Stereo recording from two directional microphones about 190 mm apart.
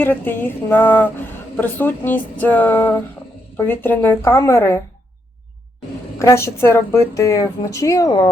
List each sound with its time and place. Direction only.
0.0 s speech: 10° left (ahead or behind)
6.1 s speech: 15° left (ahead or behind)